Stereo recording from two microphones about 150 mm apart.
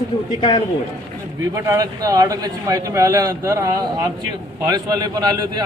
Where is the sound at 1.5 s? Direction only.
20° right (ahead or behind).